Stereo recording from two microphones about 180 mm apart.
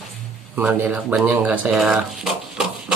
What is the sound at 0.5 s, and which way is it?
Speech, 10° right (ahead or behind).